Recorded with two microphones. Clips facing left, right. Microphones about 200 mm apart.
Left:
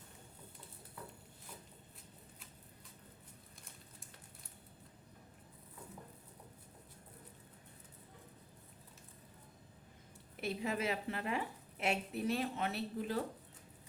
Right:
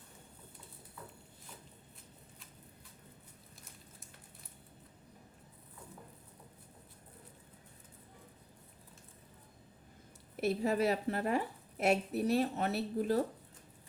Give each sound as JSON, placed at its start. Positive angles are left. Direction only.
{"t": 10.3, "sound": "a woman's voice", "side_deg": -40}